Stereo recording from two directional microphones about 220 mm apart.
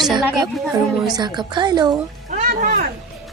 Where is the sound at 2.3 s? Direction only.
35° right (ahead or behind).